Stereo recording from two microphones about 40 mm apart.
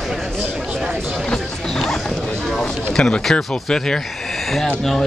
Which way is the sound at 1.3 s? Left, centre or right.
Centre.